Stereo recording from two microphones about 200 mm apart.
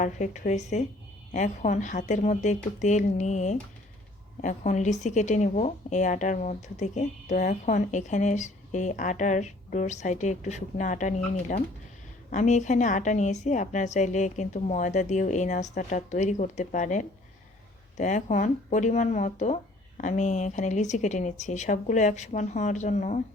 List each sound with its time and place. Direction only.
0.0 s speech: 40° left (ahead or behind)